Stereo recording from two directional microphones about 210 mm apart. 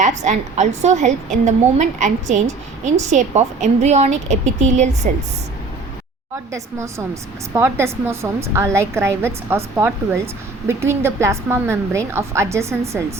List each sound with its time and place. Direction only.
0.0 s a woman's voice: 35° right (ahead or behind)
6.5 s a woman's voice: 15° right (ahead or behind)